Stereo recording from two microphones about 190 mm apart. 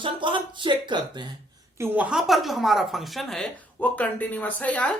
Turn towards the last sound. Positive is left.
turn(degrees=10)  # may be behind; listen again after turning